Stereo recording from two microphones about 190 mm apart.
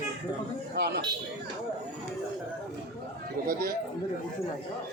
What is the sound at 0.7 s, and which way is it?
Speech, 60° right (ahead or behind).